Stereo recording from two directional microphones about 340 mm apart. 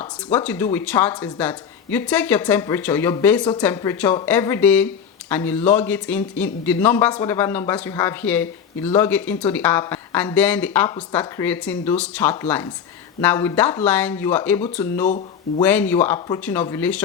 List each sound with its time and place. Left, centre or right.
0.0 s speech: centre